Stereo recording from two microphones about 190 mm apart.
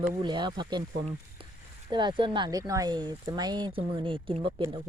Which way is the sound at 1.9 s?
25° right (ahead or behind).